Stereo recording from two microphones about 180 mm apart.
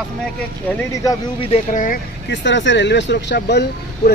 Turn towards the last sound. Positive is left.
turn(degrees=65)  # may be behind; listen again after turning